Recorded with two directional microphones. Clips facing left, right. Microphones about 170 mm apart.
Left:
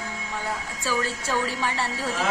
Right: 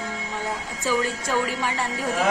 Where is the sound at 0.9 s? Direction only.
15° right (ahead or behind).